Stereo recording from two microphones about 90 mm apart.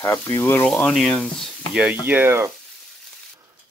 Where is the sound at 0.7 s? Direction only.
5° left (ahead or behind).